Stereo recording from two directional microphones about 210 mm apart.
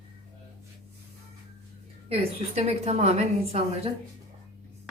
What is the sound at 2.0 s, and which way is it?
A woman's voice, 30° right (ahead or behind).